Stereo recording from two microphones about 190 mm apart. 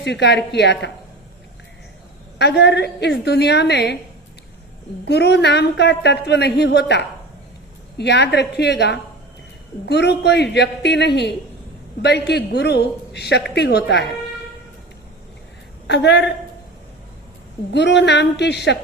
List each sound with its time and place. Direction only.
0.0 s a woman's voice: 65° left (ahead or behind)
2.4 s a woman's voice: 60° left (ahead or behind)
5.0 s a woman's voice: 60° left (ahead or behind)
15.9 s a woman's voice: 65° left (ahead or behind)
17.7 s a woman's voice: 65° left (ahead or behind)